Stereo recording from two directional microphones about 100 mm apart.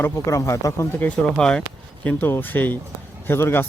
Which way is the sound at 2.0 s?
20° left (ahead or behind).